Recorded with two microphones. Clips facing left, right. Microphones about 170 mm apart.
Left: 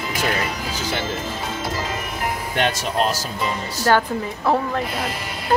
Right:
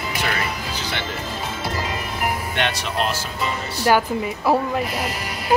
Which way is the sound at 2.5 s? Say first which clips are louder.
Left 6 dB; 45° left (ahead or behind).